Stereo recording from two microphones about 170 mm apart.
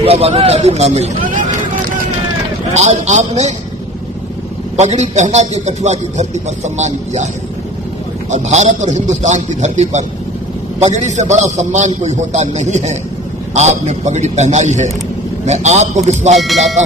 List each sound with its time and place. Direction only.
0.0 s a man's voice: 35° right (ahead or behind)
4.8 s a man's voice: 40° right (ahead or behind)
8.3 s a man's voice: 40° right (ahead or behind)